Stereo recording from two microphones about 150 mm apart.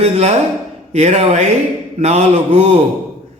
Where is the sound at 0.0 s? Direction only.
45° right (ahead or behind).